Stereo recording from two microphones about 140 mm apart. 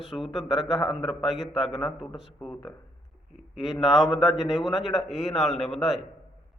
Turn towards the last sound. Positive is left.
turn(degrees=0)  # may be behind; listen again after turning